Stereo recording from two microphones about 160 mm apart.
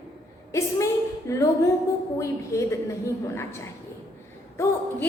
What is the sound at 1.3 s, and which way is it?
A woman's voice, 20° left (ahead or behind).